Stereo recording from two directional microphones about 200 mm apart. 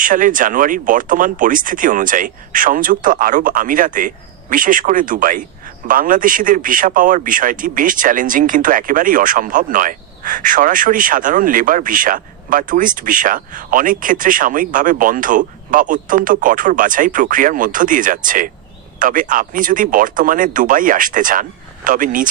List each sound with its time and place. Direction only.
0.0 s speech: 40° right (ahead or behind)